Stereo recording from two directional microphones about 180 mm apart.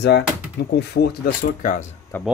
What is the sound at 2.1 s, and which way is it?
Speech, 10° left (ahead or behind).